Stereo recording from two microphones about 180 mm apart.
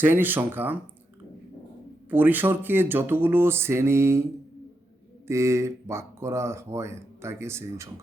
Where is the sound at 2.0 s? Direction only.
10° right (ahead or behind).